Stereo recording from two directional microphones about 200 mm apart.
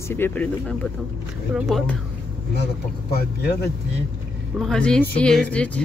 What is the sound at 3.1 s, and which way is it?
Speech, 50° left (ahead or behind).